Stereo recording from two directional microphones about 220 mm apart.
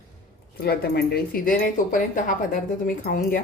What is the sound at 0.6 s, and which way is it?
A woman's voice, 45° left (ahead or behind).